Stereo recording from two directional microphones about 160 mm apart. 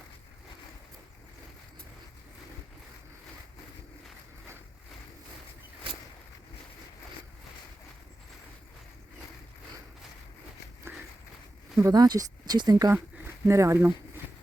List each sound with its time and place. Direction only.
11.8 s speech: 25° right (ahead or behind)